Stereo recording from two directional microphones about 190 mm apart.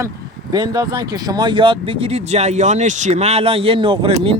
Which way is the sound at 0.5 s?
20° right (ahead or behind).